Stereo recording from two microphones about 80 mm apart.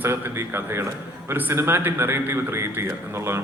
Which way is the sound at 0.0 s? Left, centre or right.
Right.